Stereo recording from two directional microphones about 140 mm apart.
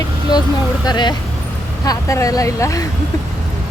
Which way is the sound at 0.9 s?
30° left (ahead or behind).